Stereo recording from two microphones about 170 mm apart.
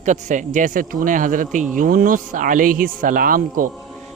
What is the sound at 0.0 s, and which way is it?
A man's voice, 45° right (ahead or behind).